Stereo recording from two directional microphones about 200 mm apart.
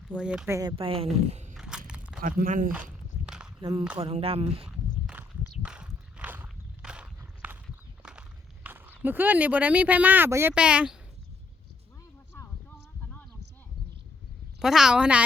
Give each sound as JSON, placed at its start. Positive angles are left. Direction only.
{"t": 0.1, "sound": "speech", "side_deg": -5}
{"t": 0.8, "sound": "speech", "side_deg": -30}
{"t": 1.5, "sound": "walk", "side_deg": -5}
{"t": 1.9, "sound": "a sound", "side_deg": -5}
{"t": 2.2, "sound": "speech", "side_deg": -45}
{"t": 3.2, "sound": "walk", "side_deg": -5}
{"t": 3.6, "sound": "speech", "side_deg": -25}
{"t": 4.6, "sound": "a sound", "side_deg": -5}
{"t": 5.6, "sound": "walk", "side_deg": -5}
{"t": 8.6, "sound": "speech", "side_deg": -10}
{"t": 14.6, "sound": "a woman's voice", "side_deg": -5}